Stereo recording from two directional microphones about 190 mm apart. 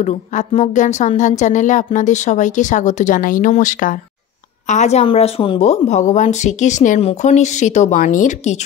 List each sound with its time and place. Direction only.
0.0 s a woman's voice: 35° left (ahead or behind)